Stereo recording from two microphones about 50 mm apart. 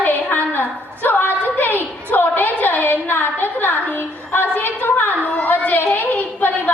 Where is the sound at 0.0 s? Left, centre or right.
Left.